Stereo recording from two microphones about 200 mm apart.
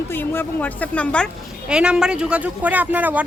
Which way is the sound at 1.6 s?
5° right (ahead or behind).